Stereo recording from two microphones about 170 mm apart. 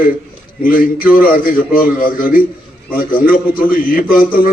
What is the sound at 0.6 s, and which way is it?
A man's voice, 55° left (ahead or behind).